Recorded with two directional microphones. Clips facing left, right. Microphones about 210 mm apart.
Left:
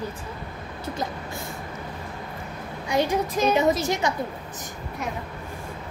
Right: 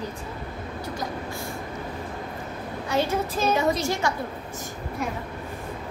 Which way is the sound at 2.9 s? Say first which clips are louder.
Left 2 dB; 15° left (ahead or behind).